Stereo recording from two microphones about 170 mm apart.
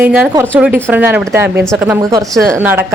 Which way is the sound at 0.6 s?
10° right (ahead or behind).